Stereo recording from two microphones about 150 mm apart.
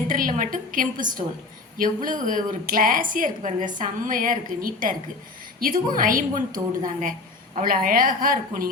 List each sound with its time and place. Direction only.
0.1 s a woman's voice: 60° right (ahead or behind)